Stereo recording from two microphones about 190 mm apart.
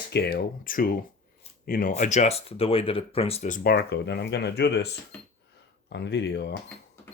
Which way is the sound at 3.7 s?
60° left (ahead or behind).